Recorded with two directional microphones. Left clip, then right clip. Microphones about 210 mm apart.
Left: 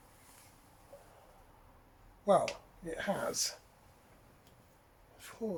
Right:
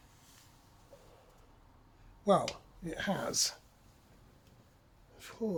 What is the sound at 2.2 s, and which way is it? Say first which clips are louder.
Speech: even; 50° right (ahead or behind).